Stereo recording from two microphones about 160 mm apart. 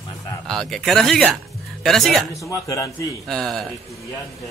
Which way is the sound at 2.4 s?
20° left (ahead or behind).